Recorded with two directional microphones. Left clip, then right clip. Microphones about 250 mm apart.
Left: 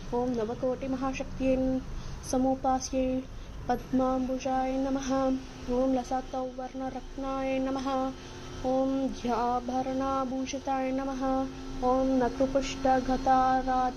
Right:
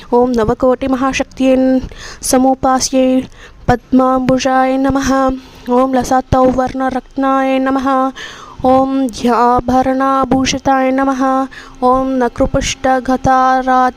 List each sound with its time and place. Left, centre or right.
0.1 s music: right
9.4 s music: right
9.8 s music: right